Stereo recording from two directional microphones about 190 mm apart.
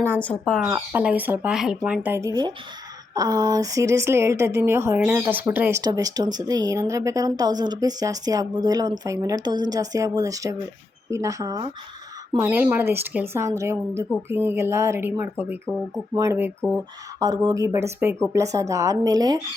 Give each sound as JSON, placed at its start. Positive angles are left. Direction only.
{"t": 0.0, "sound": "speech", "side_deg": 10}
{"t": 0.6, "sound": "a woman's voice", "side_deg": -10}